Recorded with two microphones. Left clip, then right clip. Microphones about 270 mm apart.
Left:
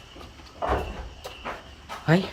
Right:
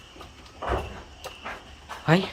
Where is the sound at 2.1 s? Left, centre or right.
Centre.